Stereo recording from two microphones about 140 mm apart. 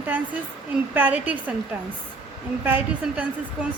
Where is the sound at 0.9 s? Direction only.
10° right (ahead or behind).